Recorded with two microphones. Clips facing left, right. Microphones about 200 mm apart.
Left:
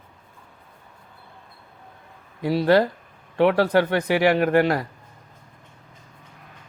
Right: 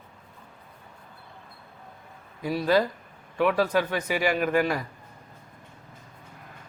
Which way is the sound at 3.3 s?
70° left (ahead or behind).